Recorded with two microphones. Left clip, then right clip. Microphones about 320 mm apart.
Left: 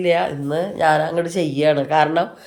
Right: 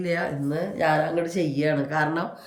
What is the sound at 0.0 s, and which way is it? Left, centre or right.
Speech, left.